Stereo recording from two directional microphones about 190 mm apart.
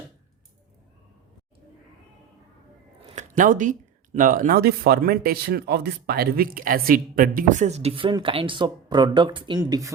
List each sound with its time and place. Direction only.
3.2 s speech: 45° right (ahead or behind); by 9.9 s 20° right (ahead or behind)